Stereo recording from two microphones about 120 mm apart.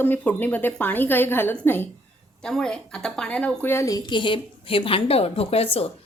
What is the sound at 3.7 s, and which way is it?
A woman's voice, 25° left (ahead or behind).